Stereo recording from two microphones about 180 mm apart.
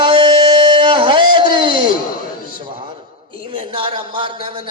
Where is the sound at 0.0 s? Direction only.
25° right (ahead or behind).